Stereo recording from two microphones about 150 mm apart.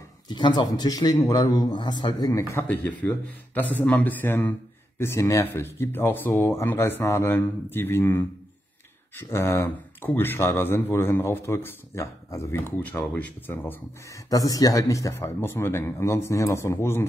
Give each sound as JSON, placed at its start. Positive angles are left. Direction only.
{"t": 0.3, "sound": "a man's voice", "side_deg": 30}